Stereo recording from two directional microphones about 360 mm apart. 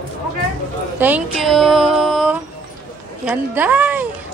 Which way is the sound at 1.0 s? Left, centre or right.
Centre.